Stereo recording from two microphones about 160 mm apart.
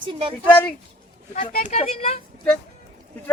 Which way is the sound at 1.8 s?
40° left (ahead or behind).